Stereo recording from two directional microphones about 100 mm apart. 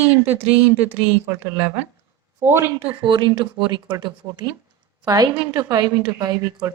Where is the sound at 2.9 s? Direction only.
55° right (ahead or behind); by 6.7 s 40° right (ahead or behind).